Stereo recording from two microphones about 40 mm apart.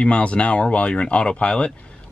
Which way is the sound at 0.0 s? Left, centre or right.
Left.